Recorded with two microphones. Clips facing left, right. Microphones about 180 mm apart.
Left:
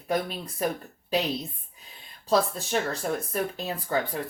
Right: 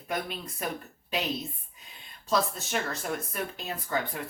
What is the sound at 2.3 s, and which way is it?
Speech, 35° left (ahead or behind).